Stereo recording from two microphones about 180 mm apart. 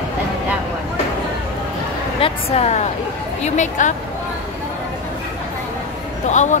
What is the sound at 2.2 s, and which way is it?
A woman's voice, 35° left (ahead or behind).